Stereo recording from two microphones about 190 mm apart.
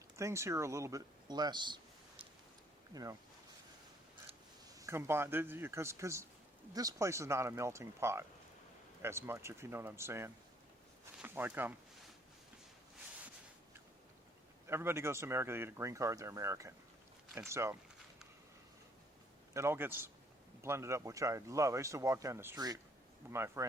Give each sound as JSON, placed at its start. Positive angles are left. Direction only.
{"t": 0.2, "sound": "speech", "side_deg": -15}
{"t": 2.9, "sound": "speech", "side_deg": -20}
{"t": 4.8, "sound": "speech", "side_deg": -15}
{"t": 14.7, "sound": "speech", "side_deg": -15}
{"t": 19.5, "sound": "speech", "side_deg": -15}